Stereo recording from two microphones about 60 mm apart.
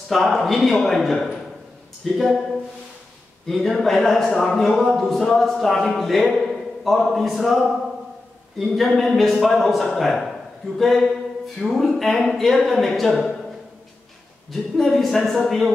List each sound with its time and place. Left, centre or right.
0.1 s speech: centre
14.5 s speech: centre